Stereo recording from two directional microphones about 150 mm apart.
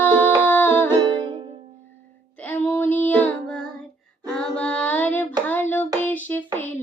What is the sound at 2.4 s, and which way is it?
Female singing, 10° left (ahead or behind).